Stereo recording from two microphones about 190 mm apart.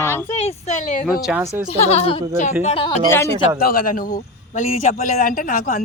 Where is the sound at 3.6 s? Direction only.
50° left (ahead or behind).